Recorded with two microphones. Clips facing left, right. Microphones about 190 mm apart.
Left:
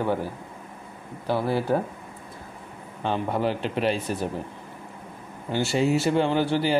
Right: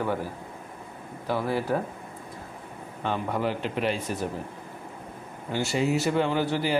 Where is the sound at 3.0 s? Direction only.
30° left (ahead or behind).